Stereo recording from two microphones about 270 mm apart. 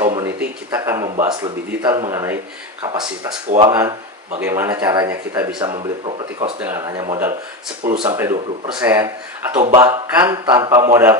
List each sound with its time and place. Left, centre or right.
0.0 s speech: centre
4.4 s speech: centre